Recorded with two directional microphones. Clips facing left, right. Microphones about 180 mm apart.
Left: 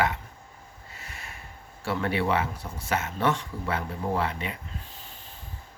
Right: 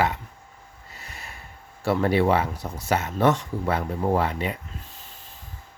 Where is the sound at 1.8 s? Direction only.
40° right (ahead or behind).